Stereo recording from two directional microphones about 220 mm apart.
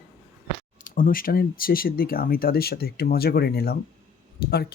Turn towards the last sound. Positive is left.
turn(degrees=45)  # may be behind; listen again after turning